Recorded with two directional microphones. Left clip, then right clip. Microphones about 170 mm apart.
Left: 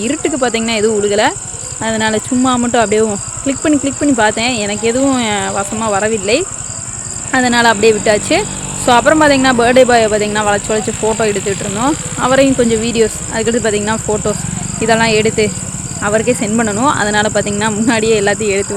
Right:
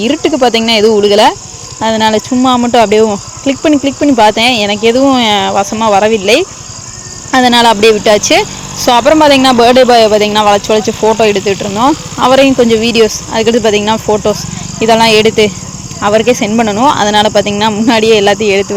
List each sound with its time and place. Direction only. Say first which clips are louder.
0.0 s cricket: right 6 dB; 30° right (ahead or behind)
1.8 s speech: right 6 dB; 25° right (ahead or behind)